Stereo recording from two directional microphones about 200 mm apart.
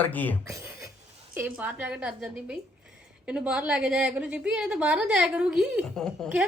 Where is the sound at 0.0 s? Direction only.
10° left (ahead or behind).